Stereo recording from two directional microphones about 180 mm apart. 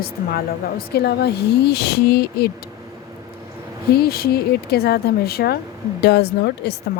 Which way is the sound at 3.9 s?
60° left (ahead or behind).